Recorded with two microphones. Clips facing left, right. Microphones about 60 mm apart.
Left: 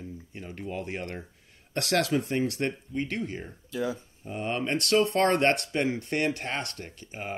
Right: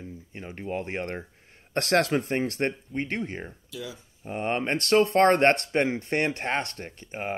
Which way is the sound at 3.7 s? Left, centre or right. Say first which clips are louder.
Left 9 dB; left.